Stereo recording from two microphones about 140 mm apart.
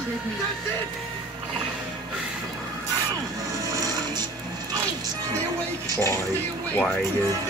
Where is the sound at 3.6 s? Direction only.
25° right (ahead or behind).